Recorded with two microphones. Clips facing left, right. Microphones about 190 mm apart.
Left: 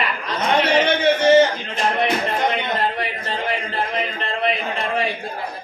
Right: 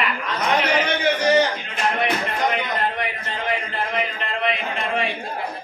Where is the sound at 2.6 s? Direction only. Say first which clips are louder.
Left 2 dB; 30° left (ahead or behind).